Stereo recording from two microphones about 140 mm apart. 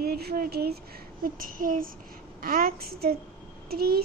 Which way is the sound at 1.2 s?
80° right.